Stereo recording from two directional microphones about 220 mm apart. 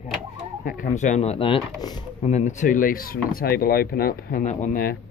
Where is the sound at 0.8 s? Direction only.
35° left (ahead or behind).